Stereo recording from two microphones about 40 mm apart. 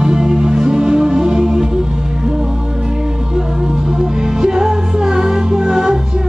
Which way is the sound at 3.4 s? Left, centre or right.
Centre.